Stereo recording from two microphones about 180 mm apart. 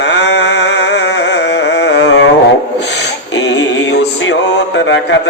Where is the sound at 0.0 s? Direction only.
75° left (ahead or behind).